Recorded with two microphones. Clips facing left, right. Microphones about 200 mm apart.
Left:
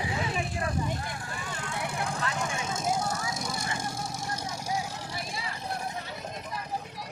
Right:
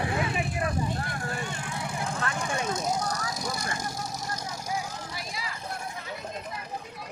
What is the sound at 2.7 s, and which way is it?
Vehicle, 25° left (ahead or behind).